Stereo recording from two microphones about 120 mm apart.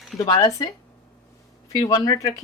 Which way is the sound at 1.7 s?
35° left (ahead or behind).